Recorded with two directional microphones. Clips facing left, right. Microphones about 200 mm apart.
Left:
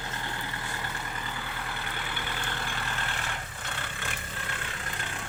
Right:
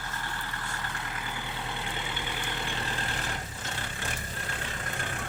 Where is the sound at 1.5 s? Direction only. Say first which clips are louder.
Right 1 dB; 25° right (ahead or behind).